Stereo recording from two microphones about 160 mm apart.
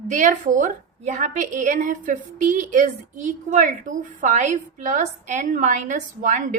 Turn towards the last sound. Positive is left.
turn(degrees=-55)  # may be behind; listen again after turning